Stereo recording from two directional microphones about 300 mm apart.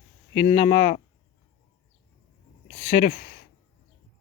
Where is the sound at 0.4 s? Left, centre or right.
Left.